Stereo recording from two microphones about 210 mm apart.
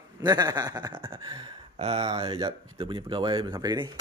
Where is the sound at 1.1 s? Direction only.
25° right (ahead or behind).